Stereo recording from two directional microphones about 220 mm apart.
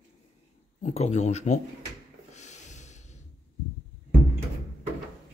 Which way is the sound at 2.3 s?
30° left (ahead or behind).